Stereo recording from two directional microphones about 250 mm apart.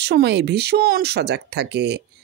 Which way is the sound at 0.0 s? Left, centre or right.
Right.